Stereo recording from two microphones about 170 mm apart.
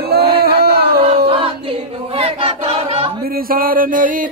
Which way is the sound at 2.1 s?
35° right (ahead or behind).